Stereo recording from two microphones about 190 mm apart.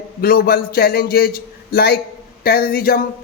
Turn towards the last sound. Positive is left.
turn(degrees=50)  # may be behind; listen again after turning